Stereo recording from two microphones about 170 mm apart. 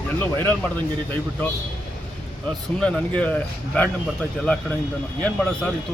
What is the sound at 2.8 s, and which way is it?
Speech, 5° left (ahead or behind).